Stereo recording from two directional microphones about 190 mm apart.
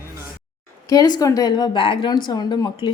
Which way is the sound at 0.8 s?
20° left (ahead or behind).